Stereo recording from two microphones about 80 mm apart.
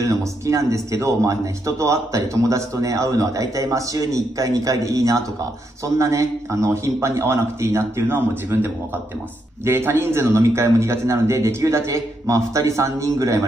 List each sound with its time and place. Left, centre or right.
0.0 s a man's voice: right